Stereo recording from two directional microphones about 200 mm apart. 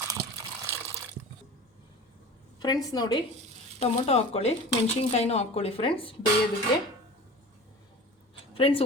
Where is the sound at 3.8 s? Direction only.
30° left (ahead or behind).